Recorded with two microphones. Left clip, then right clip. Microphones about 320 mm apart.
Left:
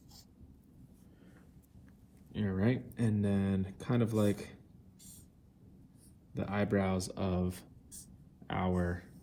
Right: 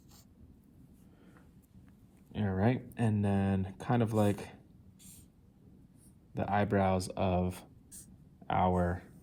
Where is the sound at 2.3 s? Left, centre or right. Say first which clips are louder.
Right 2 dB; right.